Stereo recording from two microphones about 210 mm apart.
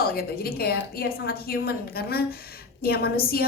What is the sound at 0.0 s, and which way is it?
A woman's voice, 45° left (ahead or behind).